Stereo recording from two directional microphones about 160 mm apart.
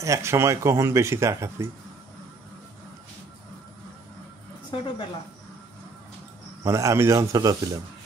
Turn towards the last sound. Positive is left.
turn(degrees=-20)  # may be behind; listen again after turning